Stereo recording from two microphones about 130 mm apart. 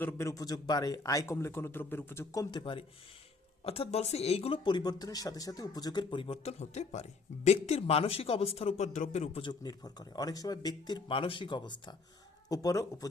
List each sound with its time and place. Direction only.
0.0 s speech: 20° left (ahead or behind)
2.5 s speech: 40° left (ahead or behind)
3.6 s speech: 50° left (ahead or behind)
9.4 s speech: 35° left (ahead or behind)